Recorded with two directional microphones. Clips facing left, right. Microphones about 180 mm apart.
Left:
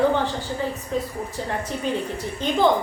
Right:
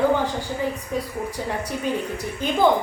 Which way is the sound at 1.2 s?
10° right (ahead or behind).